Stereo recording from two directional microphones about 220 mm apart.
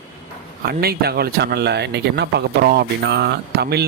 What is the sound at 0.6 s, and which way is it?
Speech, 45° right (ahead or behind).